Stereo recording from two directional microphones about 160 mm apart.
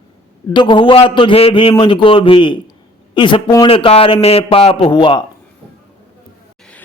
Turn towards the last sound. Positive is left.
turn(degrees=30)  # may be behind; listen again after turning